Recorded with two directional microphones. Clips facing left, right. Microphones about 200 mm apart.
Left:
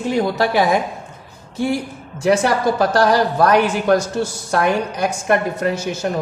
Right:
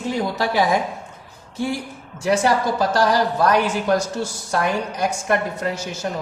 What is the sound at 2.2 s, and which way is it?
A woman's voice, 60° left (ahead or behind).